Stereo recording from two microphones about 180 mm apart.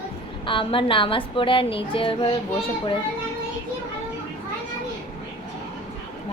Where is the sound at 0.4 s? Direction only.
30° left (ahead or behind).